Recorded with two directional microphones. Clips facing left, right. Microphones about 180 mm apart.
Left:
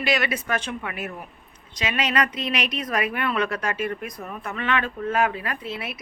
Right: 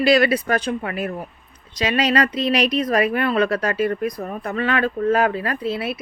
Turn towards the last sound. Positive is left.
turn(degrees=-30)  # may be behind; listen again after turning